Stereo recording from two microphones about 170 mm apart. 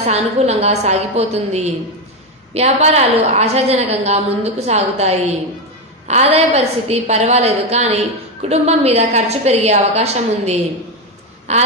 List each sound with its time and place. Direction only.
0.0 s a woman's voice: 40° right (ahead or behind)